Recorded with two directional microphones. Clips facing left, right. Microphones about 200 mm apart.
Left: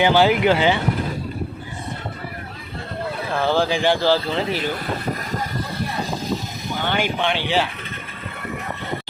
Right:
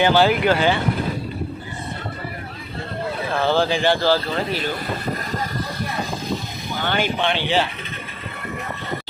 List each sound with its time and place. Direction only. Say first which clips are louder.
0.0 s speech: left 1 dB; 15° left (ahead or behind)
3.4 s speech: even; 10° left (ahead or behind)
6.8 s speech: right 1 dB; 15° left (ahead or behind)